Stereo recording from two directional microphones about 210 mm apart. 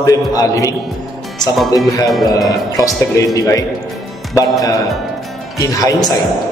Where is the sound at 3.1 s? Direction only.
15° left (ahead or behind).